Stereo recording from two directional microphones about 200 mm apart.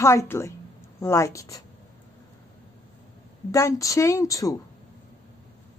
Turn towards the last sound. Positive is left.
turn(degrees=15)  # may be behind; listen again after turning